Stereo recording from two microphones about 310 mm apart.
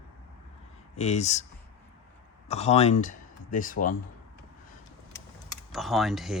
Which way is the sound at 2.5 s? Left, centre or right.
Left.